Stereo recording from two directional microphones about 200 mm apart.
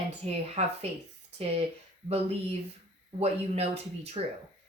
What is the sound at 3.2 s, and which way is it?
Speech, 30° right (ahead or behind).